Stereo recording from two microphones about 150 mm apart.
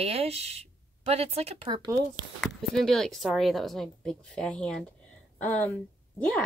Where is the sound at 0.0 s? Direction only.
45° right (ahead or behind).